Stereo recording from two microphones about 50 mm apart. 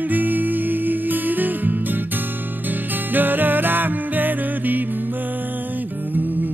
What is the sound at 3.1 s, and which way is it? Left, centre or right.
Music, right.